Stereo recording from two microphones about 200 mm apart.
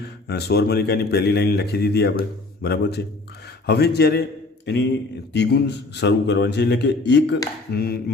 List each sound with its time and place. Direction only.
0.0 s a man's voice: 55° left (ahead or behind)